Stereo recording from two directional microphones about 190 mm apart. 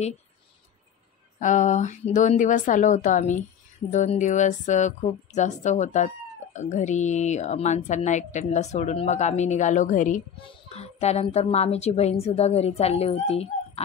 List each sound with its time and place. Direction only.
1.4 s a woman's voice: 40° left (ahead or behind)
10.4 s a woman's voice: 30° left (ahead or behind)